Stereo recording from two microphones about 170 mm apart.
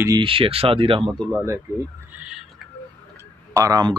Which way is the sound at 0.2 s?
30° right (ahead or behind).